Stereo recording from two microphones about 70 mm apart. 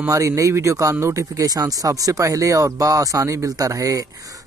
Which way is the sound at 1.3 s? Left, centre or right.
Right.